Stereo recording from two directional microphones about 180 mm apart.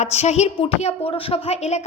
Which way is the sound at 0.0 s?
35° left (ahead or behind).